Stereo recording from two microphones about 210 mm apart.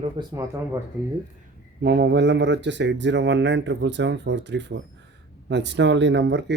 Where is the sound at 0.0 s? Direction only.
20° right (ahead or behind).